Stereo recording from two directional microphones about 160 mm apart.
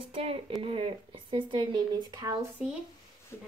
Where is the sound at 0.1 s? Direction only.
35° right (ahead or behind).